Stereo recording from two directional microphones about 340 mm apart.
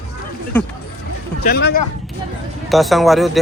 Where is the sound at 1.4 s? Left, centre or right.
Left.